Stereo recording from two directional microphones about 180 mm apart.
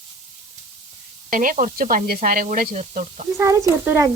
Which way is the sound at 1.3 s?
50° right (ahead or behind).